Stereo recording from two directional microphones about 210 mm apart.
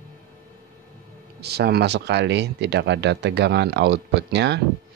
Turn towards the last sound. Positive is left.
turn(degrees=-55)  # may be behind; listen again after turning